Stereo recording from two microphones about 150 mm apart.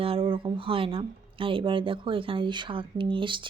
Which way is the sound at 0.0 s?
40° right (ahead or behind).